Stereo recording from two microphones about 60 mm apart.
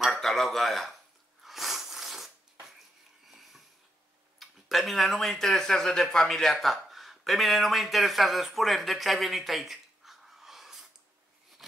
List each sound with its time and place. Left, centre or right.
0.0 s a sound: centre
3.3 s wheeze: centre
4.4 s speech: centre